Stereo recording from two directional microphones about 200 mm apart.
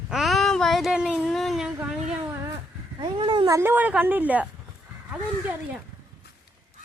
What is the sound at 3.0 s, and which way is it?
Speech, 25° right (ahead or behind).